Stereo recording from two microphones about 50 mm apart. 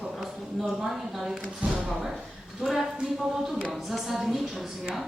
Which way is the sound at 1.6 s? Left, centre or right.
Right.